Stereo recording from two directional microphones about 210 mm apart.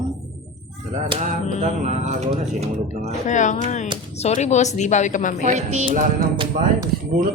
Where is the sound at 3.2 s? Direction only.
35° left (ahead or behind).